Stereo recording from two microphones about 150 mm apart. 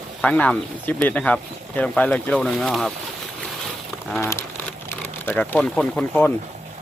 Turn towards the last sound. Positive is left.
turn(degrees=10)  # may be behind; listen again after turning